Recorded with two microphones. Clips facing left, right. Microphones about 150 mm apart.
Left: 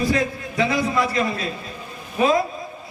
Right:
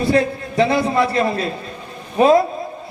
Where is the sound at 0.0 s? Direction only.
30° right (ahead or behind).